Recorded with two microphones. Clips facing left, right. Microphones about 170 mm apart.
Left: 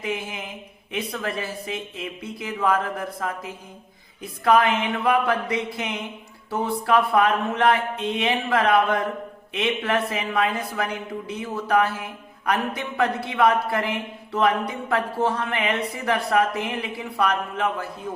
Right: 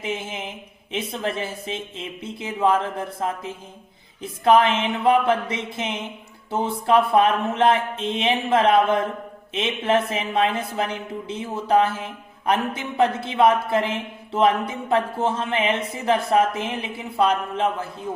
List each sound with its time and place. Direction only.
0.0 s speech: 25° right (ahead or behind)